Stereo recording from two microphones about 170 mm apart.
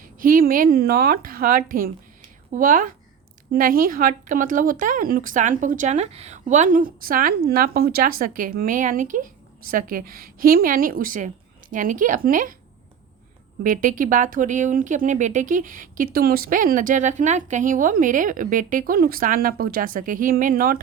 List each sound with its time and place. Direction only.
0.0 s speech: 55° right (ahead or behind)
13.6 s speech: 55° right (ahead or behind)